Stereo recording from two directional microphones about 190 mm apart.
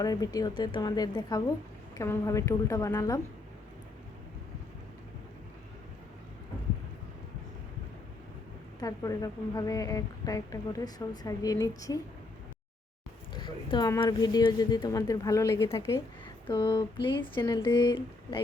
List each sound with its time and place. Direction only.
0.0 s a woman's voice: 20° left (ahead or behind)
8.8 s a woman's voice: 20° left (ahead or behind)
13.3 s a woman's voice: 25° left (ahead or behind)